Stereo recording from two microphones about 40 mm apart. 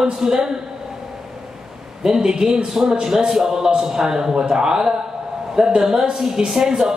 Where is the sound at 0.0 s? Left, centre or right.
Centre.